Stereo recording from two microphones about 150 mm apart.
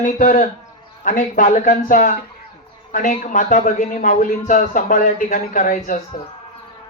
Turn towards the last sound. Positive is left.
turn(degrees=60)  # may be behind; listen again after turning